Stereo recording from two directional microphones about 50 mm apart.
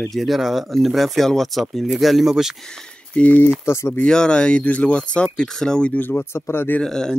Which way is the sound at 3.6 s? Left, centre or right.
Left.